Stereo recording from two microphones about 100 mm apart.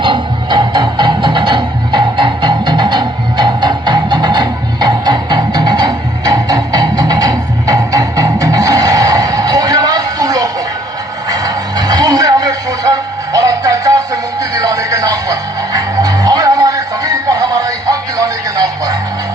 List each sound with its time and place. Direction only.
0.0 s music: 50° right (ahead or behind)